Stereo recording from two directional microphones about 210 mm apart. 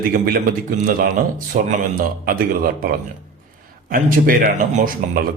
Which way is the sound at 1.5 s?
40° right (ahead or behind).